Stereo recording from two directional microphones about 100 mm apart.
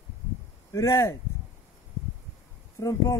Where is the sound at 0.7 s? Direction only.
30° left (ahead or behind).